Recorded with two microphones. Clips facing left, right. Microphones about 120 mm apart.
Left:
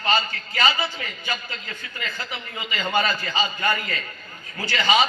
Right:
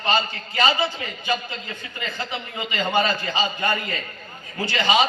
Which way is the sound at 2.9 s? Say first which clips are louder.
Right 1 dB; 20° right (ahead or behind).